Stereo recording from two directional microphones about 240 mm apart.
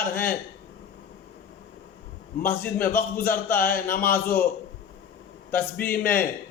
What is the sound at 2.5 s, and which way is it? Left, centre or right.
Speech, left.